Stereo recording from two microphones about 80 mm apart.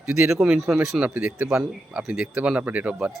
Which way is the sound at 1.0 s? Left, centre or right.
Right.